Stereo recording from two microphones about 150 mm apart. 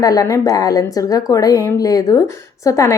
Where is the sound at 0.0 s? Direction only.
25° left (ahead or behind).